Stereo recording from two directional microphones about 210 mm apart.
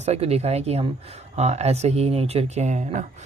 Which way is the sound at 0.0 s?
30° right (ahead or behind).